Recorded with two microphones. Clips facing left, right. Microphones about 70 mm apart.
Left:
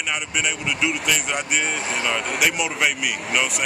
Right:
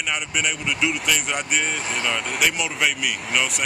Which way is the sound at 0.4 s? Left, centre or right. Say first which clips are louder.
Even; centre.